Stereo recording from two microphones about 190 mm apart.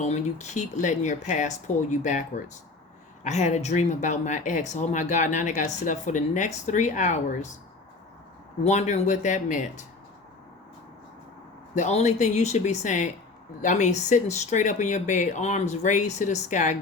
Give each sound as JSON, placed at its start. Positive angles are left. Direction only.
{"t": 0.0, "sound": "speech", "side_deg": 35}
{"t": 8.6, "sound": "speech", "side_deg": 35}
{"t": 11.7, "sound": "speech", "side_deg": 35}